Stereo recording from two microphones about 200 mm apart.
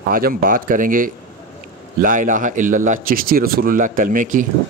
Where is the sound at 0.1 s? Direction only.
45° right (ahead or behind).